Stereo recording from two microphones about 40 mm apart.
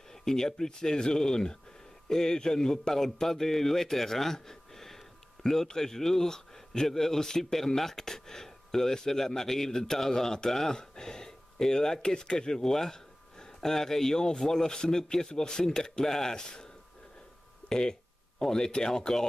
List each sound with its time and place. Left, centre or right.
0.1 s speech: centre
17.6 s speech: centre